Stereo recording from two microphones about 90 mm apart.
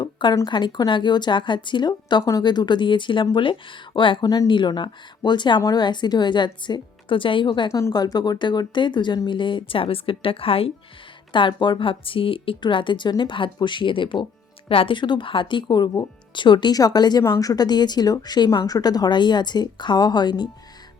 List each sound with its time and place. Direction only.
0.0 s a sound: 60° left (ahead or behind)
0.4 s a woman's voice: 55° left (ahead or behind)
7.7 s speech: 35° left (ahead or behind); by 10.7 s 90° left
11.3 s a woman's voice: 65° left (ahead or behind)
14.7 s a woman's voice: 80° left; by 17.2 s 50° left (ahead or behind)
17.2 s speech: 40° left (ahead or behind)